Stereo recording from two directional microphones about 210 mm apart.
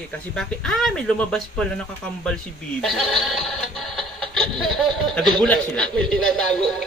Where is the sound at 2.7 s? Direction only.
Centre (ahead or behind).